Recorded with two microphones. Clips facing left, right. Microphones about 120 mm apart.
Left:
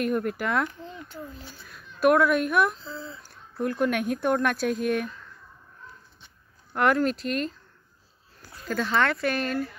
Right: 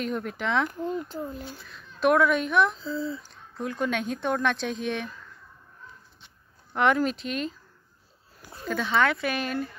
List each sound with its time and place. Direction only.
0.0 s speech: 5° left (ahead or behind)
0.7 s speech: 45° right (ahead or behind)
2.0 s speech: 5° left (ahead or behind)
6.7 s speech: centre (ahead or behind)
8.4 s a sound: 25° right (ahead or behind)
8.6 s speech: centre (ahead or behind)